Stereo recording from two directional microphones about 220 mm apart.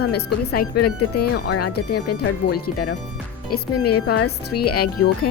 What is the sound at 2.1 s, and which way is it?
Speech, 45° left (ahead or behind).